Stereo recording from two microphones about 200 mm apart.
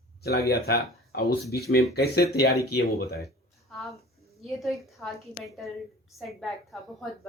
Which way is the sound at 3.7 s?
Centre (ahead or behind).